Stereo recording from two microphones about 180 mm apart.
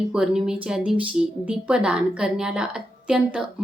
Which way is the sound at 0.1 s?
5° right (ahead or behind).